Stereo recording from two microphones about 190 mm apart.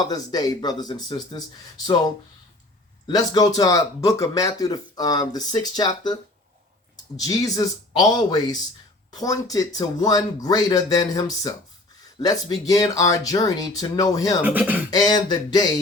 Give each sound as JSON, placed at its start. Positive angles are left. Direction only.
{"t": 0.0, "sound": "speech", "side_deg": 20}
{"t": 3.1, "sound": "speech", "side_deg": 20}
{"t": 14.4, "sound": "speech", "side_deg": -10}
{"t": 14.8, "sound": "speech", "side_deg": 20}